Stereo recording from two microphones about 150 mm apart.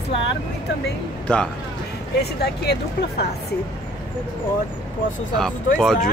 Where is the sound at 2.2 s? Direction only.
90° left.